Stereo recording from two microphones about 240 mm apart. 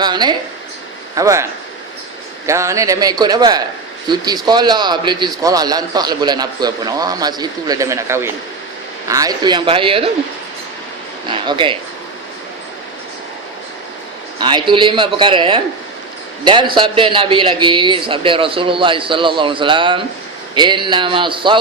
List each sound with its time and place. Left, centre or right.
0.0 s speech: centre
2.5 s a man's voice: centre
11.3 s a man's voice: right
14.3 s a man's voice: centre